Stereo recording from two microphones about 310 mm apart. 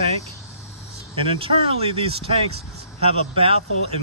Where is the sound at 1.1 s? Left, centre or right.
Centre.